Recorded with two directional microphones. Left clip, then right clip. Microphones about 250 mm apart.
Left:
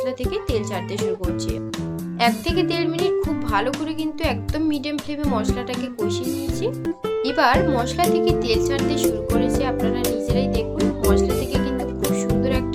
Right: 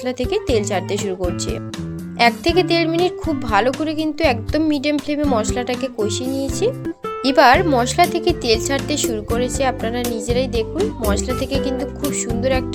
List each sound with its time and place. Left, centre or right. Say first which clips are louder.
0.0 s speech: right 3 dB; right
2.1 s speech: right 5 dB; right
7.3 s music: right 7 dB; right
11.1 s speech: left 2 dB; right
12.4 s speech: right 8 dB; right